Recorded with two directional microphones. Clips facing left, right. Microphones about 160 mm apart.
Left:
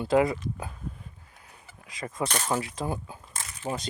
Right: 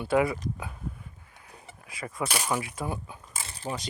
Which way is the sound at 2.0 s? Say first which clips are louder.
Left 2 dB; 20° left (ahead or behind).